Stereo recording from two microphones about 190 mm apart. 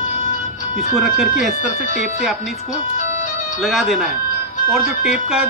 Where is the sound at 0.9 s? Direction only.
Centre (ahead or behind).